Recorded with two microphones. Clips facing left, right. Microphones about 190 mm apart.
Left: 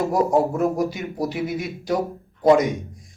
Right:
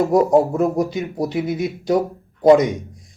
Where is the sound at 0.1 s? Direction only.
20° right (ahead or behind).